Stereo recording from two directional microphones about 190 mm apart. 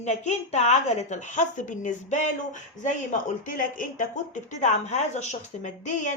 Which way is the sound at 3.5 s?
45° left (ahead or behind).